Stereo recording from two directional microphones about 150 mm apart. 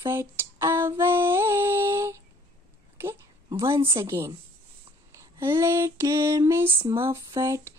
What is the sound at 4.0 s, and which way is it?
Speech, 20° right (ahead or behind).